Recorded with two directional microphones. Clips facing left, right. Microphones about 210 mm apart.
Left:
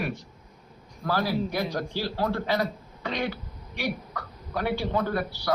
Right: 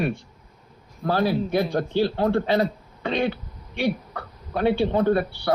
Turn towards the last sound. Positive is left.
turn(degrees=-25)  # may be behind; listen again after turning